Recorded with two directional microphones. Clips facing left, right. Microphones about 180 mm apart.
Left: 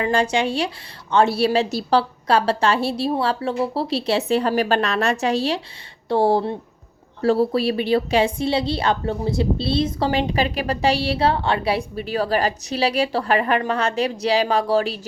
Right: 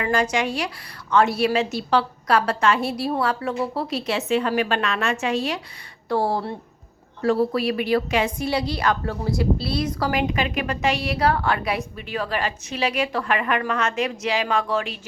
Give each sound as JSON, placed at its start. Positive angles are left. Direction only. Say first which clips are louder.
{"t": 0.0, "sound": "a woman's voice", "louder": "left 2 dB", "side_deg": 30}